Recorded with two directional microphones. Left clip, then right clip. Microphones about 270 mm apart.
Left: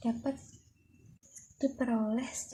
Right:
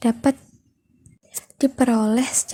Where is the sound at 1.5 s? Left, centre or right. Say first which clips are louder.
Right 13 dB; right.